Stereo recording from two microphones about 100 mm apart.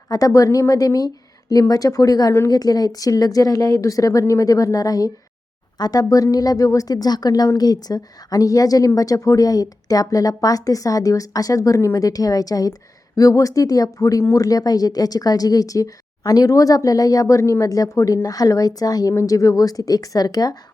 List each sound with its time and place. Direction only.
0.1 s speech: 35° left (ahead or behind)